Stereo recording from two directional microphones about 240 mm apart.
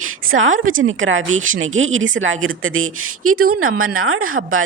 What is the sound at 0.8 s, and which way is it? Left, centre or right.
Speech, right.